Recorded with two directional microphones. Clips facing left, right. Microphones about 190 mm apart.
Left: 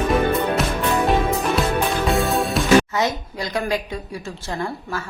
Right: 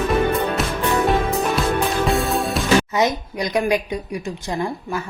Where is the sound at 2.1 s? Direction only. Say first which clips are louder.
Even; centre (ahead or behind).